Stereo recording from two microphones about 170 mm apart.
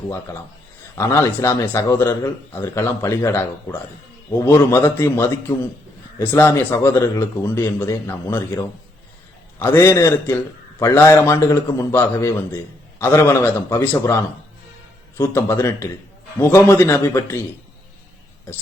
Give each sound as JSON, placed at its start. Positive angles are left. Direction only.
{"t": 0.1, "sound": "a man's voice", "side_deg": 15}
{"t": 15.2, "sound": "a man's voice", "side_deg": 15}